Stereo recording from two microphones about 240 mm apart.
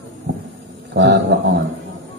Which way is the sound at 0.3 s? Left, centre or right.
Right.